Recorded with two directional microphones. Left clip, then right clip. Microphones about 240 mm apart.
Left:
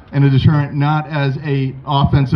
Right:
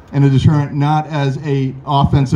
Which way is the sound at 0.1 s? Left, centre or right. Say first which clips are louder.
Right 1 dB; centre.